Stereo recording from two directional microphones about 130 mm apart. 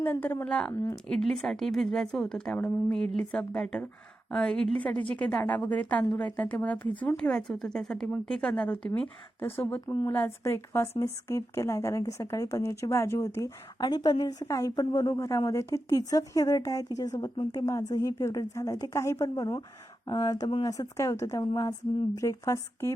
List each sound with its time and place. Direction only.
0.0 s a woman's voice: 15° left (ahead or behind)
9.8 s a woman's voice: 25° left (ahead or behind)